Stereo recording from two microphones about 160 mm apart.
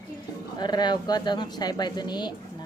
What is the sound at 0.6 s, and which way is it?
Speech, 25° left (ahead or behind).